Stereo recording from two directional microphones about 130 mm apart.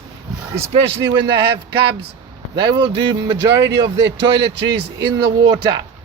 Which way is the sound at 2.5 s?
35° right (ahead or behind).